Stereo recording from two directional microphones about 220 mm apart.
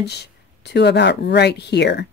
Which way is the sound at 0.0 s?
50° left (ahead or behind).